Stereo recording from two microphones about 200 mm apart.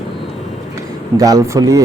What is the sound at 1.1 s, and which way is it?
Speech, 15° right (ahead or behind).